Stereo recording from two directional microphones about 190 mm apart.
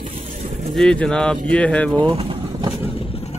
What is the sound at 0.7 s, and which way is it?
Speech, 5° left (ahead or behind).